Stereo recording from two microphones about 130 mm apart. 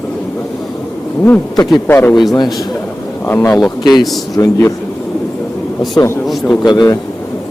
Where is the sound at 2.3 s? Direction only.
30° left (ahead or behind).